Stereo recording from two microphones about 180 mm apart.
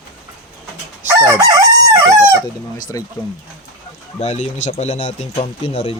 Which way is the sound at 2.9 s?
20° left (ahead or behind).